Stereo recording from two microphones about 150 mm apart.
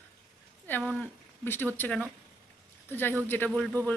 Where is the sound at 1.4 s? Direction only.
15° left (ahead or behind).